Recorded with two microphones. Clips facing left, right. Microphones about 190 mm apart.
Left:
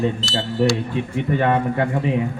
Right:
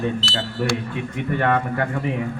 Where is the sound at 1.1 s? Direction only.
20° left (ahead or behind).